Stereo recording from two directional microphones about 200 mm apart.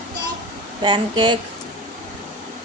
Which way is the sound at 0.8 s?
20° right (ahead or behind).